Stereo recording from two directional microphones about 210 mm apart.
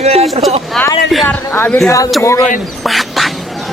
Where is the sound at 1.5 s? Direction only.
10° left (ahead or behind).